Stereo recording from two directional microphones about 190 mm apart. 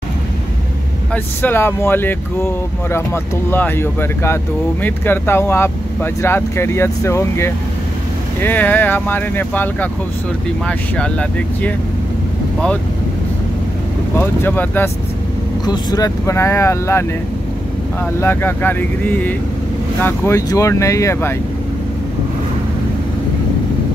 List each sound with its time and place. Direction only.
1.1 s speech: 10° left (ahead or behind)
14.1 s speech: 10° left (ahead or behind)
18.2 s speech: 10° left (ahead or behind)